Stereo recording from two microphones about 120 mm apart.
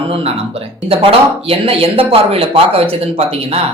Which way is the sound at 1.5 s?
55° right (ahead or behind).